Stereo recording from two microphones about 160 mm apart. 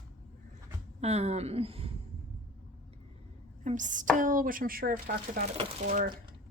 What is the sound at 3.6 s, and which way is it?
Speech, 50° right (ahead or behind).